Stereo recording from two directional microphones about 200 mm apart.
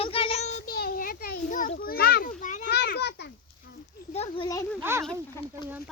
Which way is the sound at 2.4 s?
40° left (ahead or behind).